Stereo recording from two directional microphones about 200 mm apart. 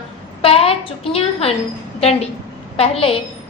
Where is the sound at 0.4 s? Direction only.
30° left (ahead or behind).